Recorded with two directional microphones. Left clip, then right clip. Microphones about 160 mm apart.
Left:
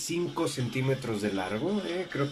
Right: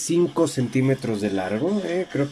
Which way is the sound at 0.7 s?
30° right (ahead or behind).